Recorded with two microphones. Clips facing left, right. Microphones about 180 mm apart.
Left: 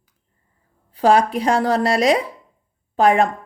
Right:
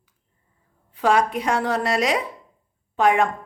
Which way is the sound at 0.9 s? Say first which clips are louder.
Left 4 dB; 35° left (ahead or behind).